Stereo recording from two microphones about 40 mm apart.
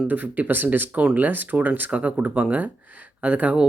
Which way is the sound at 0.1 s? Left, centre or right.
Right.